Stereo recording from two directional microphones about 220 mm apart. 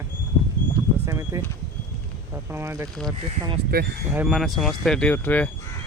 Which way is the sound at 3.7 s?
45° right (ahead or behind).